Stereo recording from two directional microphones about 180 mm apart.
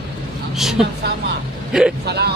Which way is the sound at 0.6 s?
Centre (ahead or behind).